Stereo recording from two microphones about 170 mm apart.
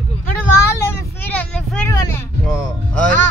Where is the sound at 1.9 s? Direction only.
15° left (ahead or behind).